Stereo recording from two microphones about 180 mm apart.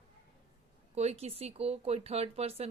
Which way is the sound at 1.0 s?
35° right (ahead or behind).